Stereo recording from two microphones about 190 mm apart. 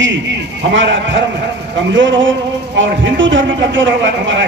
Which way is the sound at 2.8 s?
80° right.